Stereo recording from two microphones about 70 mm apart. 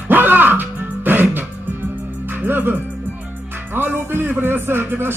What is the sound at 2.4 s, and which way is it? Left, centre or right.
Speech, right.